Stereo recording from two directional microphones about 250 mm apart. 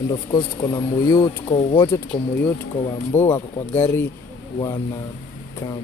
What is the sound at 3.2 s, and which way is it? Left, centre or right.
Speech, centre.